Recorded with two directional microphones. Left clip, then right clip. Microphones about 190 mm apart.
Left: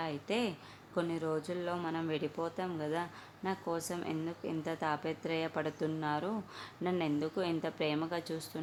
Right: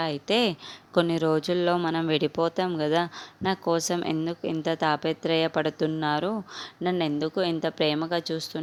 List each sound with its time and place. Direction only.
0.0 s speech: 40° right (ahead or behind)